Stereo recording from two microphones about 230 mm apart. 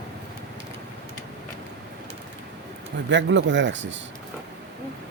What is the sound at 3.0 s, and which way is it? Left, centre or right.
Speech, right.